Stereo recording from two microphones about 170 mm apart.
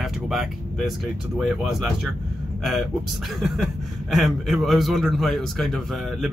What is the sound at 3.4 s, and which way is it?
A man's voice, centre (ahead or behind).